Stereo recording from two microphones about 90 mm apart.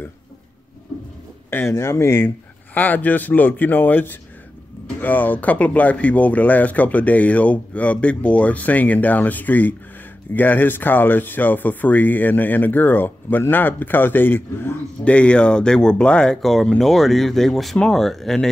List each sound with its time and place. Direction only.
1.5 s speech: 30° left (ahead or behind)
15.0 s speech: 10° left (ahead or behind)